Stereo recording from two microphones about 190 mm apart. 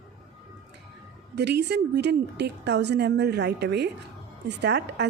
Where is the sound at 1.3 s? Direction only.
60° right (ahead or behind).